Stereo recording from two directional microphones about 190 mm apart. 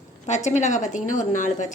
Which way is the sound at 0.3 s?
40° left (ahead or behind).